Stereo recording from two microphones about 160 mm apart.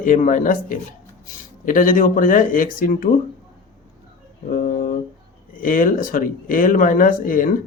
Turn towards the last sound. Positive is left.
turn(degrees=60)  # may be behind; listen again after turning